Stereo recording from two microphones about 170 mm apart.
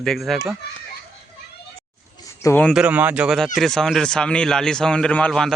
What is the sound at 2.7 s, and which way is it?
Speech, 5° right (ahead or behind).